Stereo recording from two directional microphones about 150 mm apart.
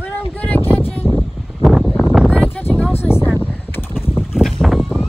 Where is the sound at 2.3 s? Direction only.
10° left (ahead or behind).